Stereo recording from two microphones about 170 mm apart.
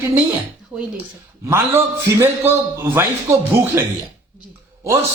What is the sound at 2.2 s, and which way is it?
A man's voice, 15° right (ahead or behind).